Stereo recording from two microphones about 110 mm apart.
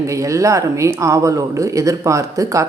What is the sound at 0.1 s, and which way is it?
A woman's voice, 30° right (ahead or behind).